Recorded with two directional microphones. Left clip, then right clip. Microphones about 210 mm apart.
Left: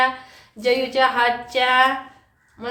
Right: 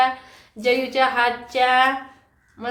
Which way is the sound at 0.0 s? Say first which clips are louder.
Even; 10° right (ahead or behind).